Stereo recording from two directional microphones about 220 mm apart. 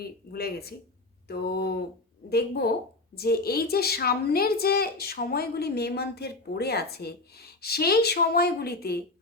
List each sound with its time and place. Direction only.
0.0 s a woman's voice: 45° left (ahead or behind)